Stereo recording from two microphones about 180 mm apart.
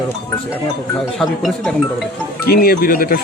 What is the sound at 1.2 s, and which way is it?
Speech, centre (ahead or behind).